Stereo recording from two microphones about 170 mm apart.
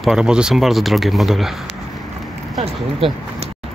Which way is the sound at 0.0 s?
5° right (ahead or behind).